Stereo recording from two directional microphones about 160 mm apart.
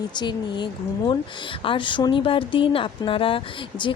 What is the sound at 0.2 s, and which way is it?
Speech, 30° left (ahead or behind).